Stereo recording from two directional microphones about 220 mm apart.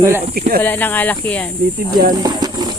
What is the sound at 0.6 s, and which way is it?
Speech, 10° left (ahead or behind).